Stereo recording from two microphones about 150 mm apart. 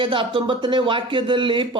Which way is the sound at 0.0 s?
35° right (ahead or behind).